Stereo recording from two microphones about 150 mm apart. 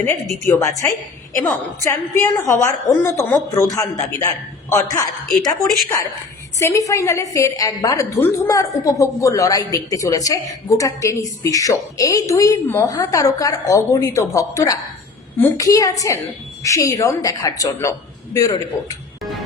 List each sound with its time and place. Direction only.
0.5 s a woman's voice: 20° left (ahead or behind)
5.6 s speech: centre (ahead or behind)
6.6 s a woman's voice: 20° left (ahead or behind)